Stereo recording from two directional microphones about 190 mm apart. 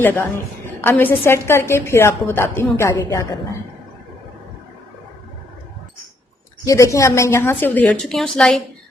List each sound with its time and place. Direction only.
0.8 s a woman's voice: 10° left (ahead or behind)
6.7 s a woman's voice: 15° left (ahead or behind)